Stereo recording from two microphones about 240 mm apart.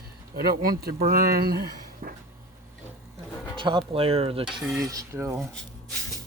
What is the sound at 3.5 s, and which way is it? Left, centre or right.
Music, centre.